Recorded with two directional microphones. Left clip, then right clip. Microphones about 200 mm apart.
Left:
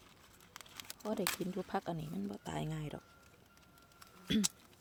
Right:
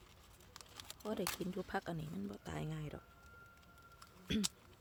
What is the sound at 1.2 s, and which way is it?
Speech, 20° left (ahead or behind).